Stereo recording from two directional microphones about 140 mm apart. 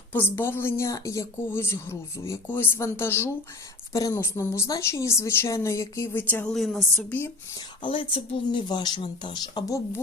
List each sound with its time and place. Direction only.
0.1 s a woman's voice: 15° left (ahead or behind)
6.2 s speech: 10° left (ahead or behind)
7.8 s speech: 40° left (ahead or behind); by 10.0 s 25° left (ahead or behind)